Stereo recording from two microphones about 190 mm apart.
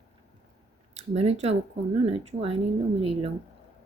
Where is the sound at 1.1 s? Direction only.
35° right (ahead or behind).